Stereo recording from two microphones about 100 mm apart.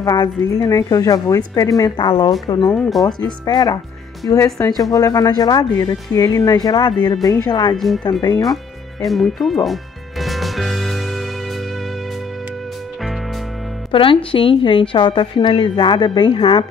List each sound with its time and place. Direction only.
0.0 s speech: 40° left (ahead or behind)
2.0 s speech: 50° left (ahead or behind)
4.2 s speech: 30° left (ahead or behind)
7.7 s speech: centre (ahead or behind)
8.0 s speech: 45° left (ahead or behind)
9.0 s music: centre (ahead or behind)
13.9 s a woman's voice: 60° left (ahead or behind)